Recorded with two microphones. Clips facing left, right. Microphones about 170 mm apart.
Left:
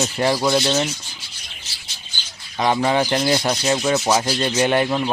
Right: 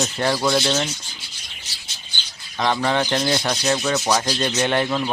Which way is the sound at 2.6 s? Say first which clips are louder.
Left 2 dB; 10° left (ahead or behind).